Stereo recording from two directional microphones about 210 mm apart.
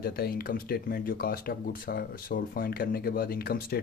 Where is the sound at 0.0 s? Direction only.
45° left (ahead or behind).